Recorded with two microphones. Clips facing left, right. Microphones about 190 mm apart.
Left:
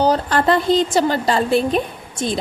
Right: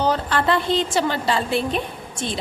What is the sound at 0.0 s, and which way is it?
A woman's voice, 40° left (ahead or behind).